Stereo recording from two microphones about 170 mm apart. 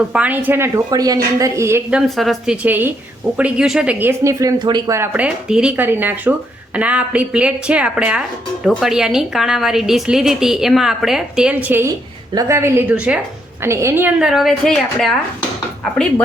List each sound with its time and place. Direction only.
0.1 s speech: 10° right (ahead or behind)
2.0 s a woman's voice: centre (ahead or behind)
2.6 s speech: 10° right (ahead or behind)
4.2 s a woman's voice: 20° right (ahead or behind)
13.6 s a woman's voice: 15° right (ahead or behind); by 15.1 s centre (ahead or behind)